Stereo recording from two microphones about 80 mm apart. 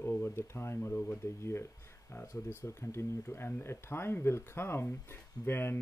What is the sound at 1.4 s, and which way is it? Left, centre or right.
Speech, left.